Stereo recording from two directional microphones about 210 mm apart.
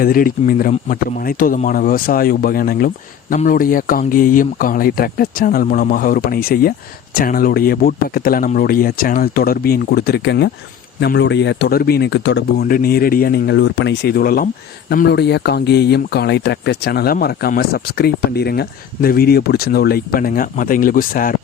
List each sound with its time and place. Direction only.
0.0 s speech: 45° left (ahead or behind)